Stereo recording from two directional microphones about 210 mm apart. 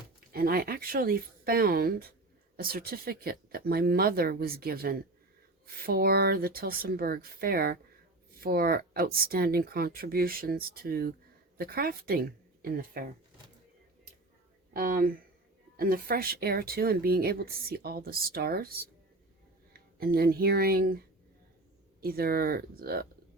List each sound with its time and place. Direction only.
0.3 s speech: 45° right (ahead or behind)
14.7 s speech: 45° right (ahead or behind)
20.0 s speech: 45° right (ahead or behind)
22.0 s speech: 45° right (ahead or behind)